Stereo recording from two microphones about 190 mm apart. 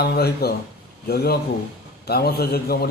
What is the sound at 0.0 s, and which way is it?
A man's voice, 55° left (ahead or behind).